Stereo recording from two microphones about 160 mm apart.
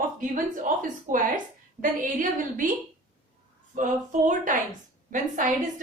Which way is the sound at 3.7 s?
55° right (ahead or behind).